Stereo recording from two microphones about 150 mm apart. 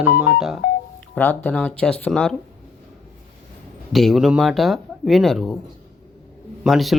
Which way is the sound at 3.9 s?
Centre (ahead or behind).